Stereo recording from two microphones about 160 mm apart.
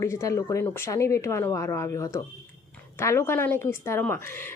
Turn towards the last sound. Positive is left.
turn(degrees=15)  # may be behind; listen again after turning